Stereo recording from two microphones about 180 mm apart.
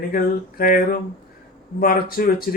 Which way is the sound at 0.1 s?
55° left (ahead or behind).